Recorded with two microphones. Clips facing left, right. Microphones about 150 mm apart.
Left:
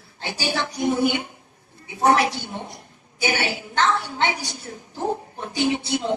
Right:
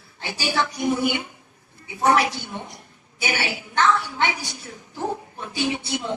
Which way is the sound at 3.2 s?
25° left (ahead or behind).